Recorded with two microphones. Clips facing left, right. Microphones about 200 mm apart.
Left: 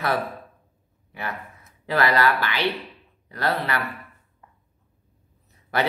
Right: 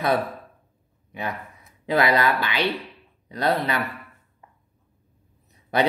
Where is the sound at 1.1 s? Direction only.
20° right (ahead or behind).